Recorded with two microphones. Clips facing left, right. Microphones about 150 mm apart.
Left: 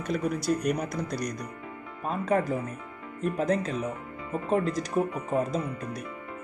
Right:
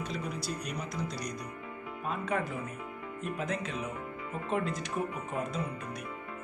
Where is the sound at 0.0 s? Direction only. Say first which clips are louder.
Left 8 dB; 50° left (ahead or behind).